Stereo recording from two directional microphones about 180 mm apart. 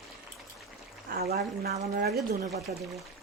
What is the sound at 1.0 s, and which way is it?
Speech, 60° right (ahead or behind).